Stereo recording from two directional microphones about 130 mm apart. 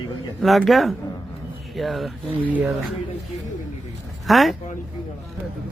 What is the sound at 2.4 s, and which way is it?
Speech, 10° right (ahead or behind).